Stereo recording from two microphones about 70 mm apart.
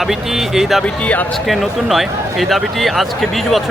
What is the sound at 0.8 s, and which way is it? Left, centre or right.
Speech, centre.